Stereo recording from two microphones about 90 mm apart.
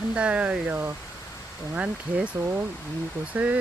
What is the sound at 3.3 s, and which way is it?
Speech, 15° right (ahead or behind).